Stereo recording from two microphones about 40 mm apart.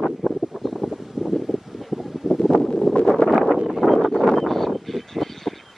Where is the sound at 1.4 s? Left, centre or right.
Centre.